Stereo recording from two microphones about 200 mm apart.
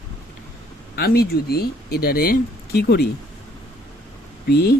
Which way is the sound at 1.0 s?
50° left (ahead or behind).